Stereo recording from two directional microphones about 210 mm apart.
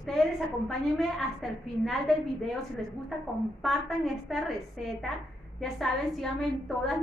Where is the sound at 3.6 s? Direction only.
Centre (ahead or behind).